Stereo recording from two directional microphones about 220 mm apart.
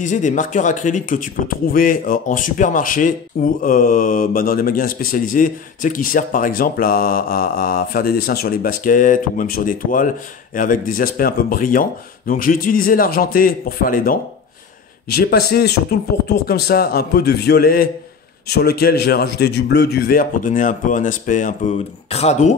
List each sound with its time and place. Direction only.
0.0 s a man's voice: 35° left (ahead or behind)